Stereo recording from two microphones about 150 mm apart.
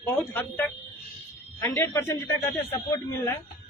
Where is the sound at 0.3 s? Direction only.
10° left (ahead or behind).